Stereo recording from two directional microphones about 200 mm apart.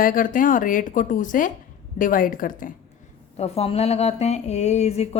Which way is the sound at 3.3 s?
30° left (ahead or behind).